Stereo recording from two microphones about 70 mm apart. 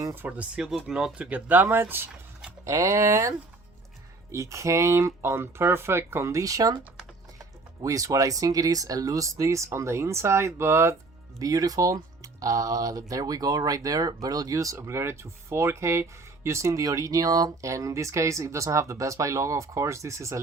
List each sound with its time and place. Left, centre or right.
0.3 s speech: centre
2.6 s speech: right
11.3 s speech: right
17.6 s speech: right